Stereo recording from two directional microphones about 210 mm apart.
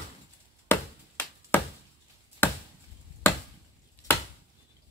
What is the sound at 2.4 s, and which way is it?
Chop, 10° left (ahead or behind).